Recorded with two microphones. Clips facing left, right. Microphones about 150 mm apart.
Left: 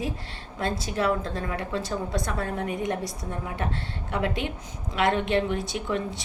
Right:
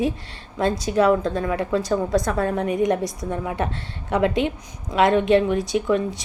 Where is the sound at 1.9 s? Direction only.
40° right (ahead or behind).